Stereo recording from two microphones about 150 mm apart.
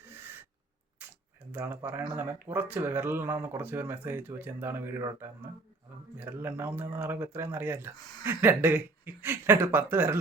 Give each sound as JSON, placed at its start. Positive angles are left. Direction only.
{"t": 0.0, "sound": "gasp", "side_deg": -15}
{"t": 1.0, "sound": "camera", "side_deg": -10}
{"t": 1.5, "sound": "speech", "side_deg": -15}
{"t": 7.9, "sound": "speech", "side_deg": 30}
{"t": 8.2, "sound": "speech", "side_deg": -15}